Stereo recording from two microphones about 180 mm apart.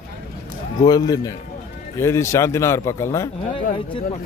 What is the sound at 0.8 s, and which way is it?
Speech, 20° left (ahead or behind).